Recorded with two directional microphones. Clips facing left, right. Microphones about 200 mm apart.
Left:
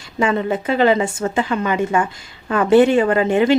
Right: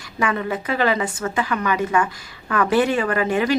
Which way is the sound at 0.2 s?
25° left (ahead or behind).